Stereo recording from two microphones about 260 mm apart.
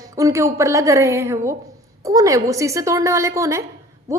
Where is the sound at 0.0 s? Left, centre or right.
Centre.